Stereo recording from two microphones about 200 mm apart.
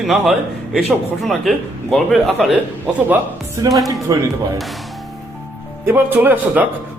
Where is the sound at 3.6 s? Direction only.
20° right (ahead or behind).